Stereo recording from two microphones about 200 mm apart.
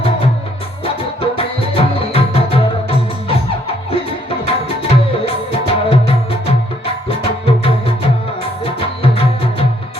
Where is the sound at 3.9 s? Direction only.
30° left (ahead or behind).